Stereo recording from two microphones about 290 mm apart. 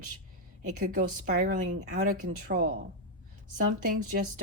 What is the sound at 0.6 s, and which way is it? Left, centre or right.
Speech, right.